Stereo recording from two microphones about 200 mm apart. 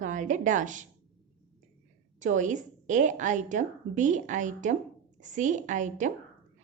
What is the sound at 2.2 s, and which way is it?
A woman's voice, 40° right (ahead or behind).